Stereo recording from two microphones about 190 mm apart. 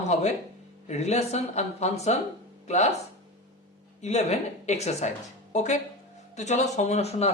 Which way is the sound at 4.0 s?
35° left (ahead or behind).